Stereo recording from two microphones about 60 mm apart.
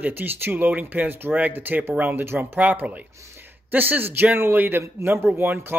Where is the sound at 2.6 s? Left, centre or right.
Right.